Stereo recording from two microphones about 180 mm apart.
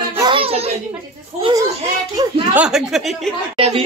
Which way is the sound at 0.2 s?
30° right (ahead or behind).